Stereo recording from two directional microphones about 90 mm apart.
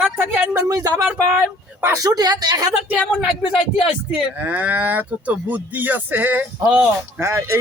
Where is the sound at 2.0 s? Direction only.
45° right (ahead or behind).